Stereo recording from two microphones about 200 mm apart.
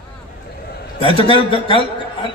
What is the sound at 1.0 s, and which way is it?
A man's voice, 25° left (ahead or behind).